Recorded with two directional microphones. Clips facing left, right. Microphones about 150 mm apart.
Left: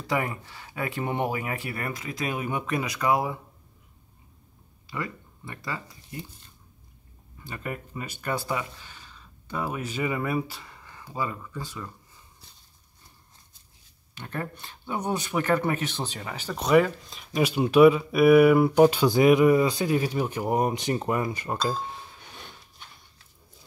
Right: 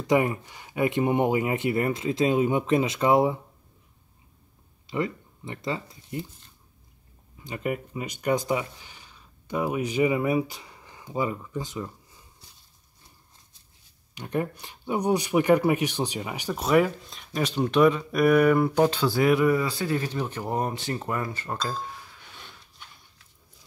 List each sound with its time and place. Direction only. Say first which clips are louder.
0.0 s speech: right 6 dB; 20° right (ahead or behind)
4.8 s speech: right 6 dB; 25° right (ahead or behind)
7.4 s speech: right 5 dB; 15° right (ahead or behind)
14.1 s speech: right 6 dB; 15° right (ahead or behind)
16.6 s speech: left 1 dB; centre (ahead or behind); by 21.5 s 15° left (ahead or behind)
21.6 s chink: left 3 dB; 25° left (ahead or behind)